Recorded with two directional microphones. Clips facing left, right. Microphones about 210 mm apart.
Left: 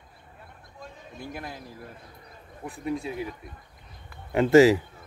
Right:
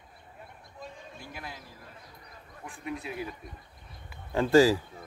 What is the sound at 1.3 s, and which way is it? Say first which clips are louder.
Speech: left 5 dB; 45° left (ahead or behind).